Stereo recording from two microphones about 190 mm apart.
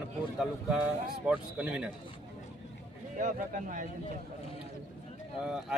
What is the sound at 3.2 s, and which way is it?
Speech, 40° right (ahead or behind).